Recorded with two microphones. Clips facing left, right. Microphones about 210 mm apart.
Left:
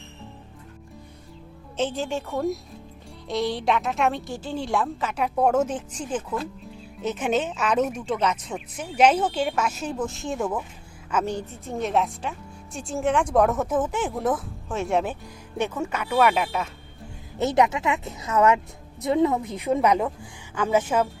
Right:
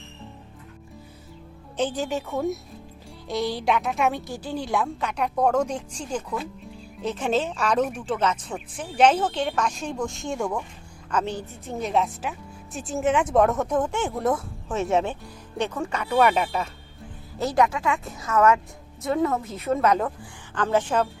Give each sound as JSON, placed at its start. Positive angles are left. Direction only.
{"t": 1.7, "sound": "a woman's voice", "side_deg": 0}
{"t": 17.3, "sound": "a woman's voice", "side_deg": 20}